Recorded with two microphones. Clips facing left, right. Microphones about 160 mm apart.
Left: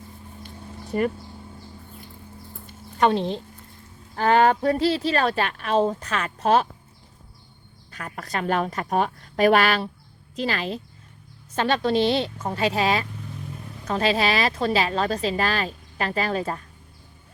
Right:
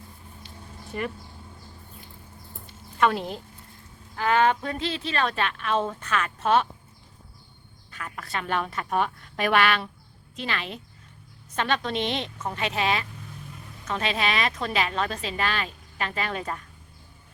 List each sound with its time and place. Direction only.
0.4 s a sound: 40° left (ahead or behind)
3.0 s a woman's voice: 25° left (ahead or behind)
4.1 s a woman's voice: 40° left (ahead or behind)
7.9 s a woman's voice: 40° left (ahead or behind)